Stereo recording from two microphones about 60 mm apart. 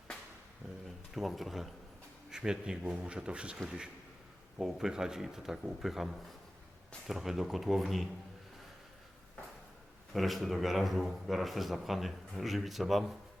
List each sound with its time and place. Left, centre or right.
1.1 s a man's voice: centre
2.3 s speech: centre
4.6 s a man's voice: centre
10.1 s a man's voice: centre